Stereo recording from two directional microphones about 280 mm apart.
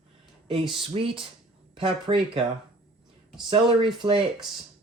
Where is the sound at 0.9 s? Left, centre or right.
Centre.